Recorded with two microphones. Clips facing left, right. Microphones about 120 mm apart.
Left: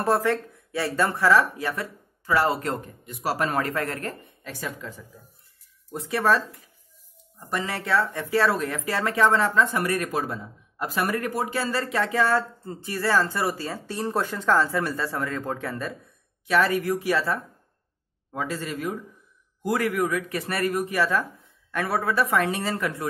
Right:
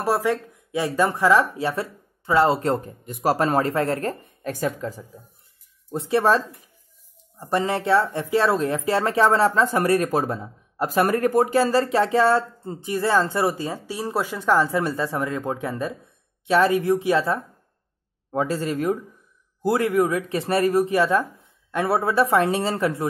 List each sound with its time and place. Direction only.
0.0 s speech: 10° right (ahead or behind); by 5.0 s 40° right (ahead or behind)
5.9 s speech: 30° right (ahead or behind)
11.9 s speech: 30° right (ahead or behind)
18.3 s speech: 35° right (ahead or behind)
19.6 s speech: 25° right (ahead or behind)